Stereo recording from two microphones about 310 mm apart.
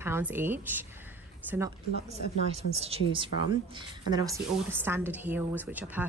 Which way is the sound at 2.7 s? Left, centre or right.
Centre.